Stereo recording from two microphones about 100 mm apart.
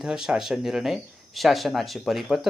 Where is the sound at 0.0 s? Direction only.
5° right (ahead or behind).